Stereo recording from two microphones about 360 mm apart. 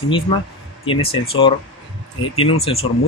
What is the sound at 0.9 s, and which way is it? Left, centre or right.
Speech, centre.